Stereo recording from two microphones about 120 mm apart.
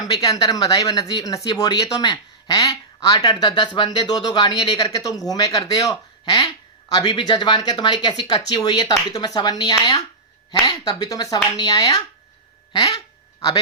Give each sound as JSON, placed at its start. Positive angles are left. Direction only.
{"t": 0.0, "sound": "speech", "side_deg": 30}